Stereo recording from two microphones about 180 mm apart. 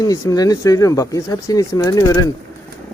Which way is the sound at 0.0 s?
20° left (ahead or behind).